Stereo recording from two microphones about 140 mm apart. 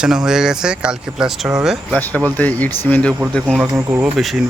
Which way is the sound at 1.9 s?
10° left (ahead or behind).